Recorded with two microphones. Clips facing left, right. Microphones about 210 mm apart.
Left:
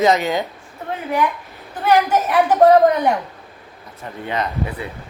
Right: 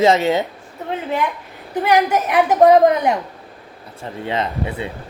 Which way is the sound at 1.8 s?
15° right (ahead or behind).